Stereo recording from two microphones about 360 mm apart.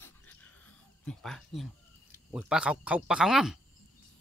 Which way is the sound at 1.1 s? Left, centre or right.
Centre.